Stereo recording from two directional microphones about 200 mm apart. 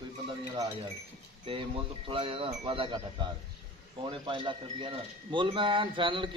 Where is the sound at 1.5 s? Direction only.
25° right (ahead or behind).